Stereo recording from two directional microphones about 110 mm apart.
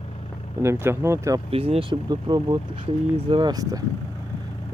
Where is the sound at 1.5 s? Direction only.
60° right (ahead or behind).